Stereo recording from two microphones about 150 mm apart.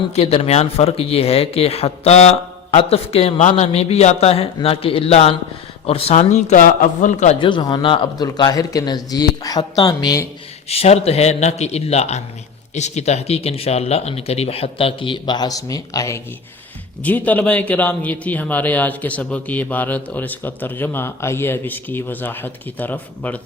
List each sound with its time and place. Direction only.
0.1 s speech: 45° left (ahead or behind)
7.3 s speech: 30° left (ahead or behind)
10.7 s speech: 45° left (ahead or behind); by 16.2 s 20° left (ahead or behind)
17.0 s speech: 10° left (ahead or behind)